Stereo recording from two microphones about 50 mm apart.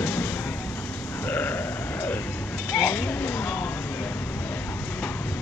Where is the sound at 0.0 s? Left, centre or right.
Left.